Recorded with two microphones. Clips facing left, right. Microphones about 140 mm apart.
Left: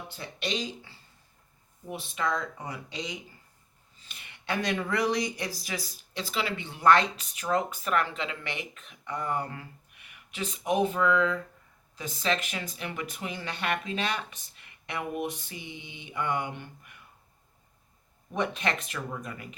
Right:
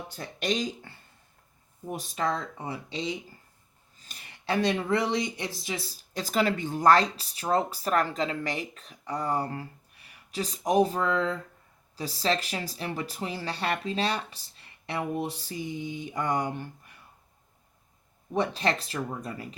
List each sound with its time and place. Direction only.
0.2 s speech: 45° right (ahead or behind); by 3.2 s 30° right (ahead or behind)
3.9 s speech: 40° right (ahead or behind)
18.3 s speech: 35° right (ahead or behind)